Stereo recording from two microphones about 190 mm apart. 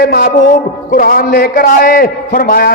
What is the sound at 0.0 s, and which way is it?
A man's voice, 55° left (ahead or behind).